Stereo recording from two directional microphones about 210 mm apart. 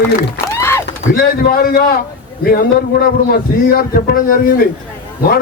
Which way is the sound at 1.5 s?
45° left (ahead or behind).